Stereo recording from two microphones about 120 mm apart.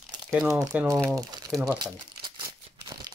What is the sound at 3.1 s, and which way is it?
Crumpling, 25° right (ahead or behind).